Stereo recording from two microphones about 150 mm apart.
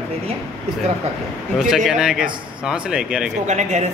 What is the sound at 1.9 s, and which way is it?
Speech, 5° right (ahead or behind).